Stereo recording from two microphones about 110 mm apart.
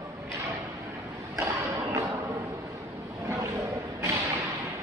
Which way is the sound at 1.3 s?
30° right (ahead or behind).